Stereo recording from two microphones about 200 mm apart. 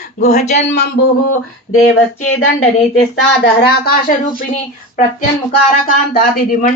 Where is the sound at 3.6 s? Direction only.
50° left (ahead or behind).